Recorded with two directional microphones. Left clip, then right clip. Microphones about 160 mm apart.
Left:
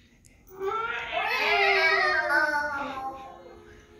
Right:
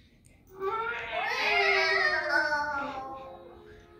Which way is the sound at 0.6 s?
10° left (ahead or behind).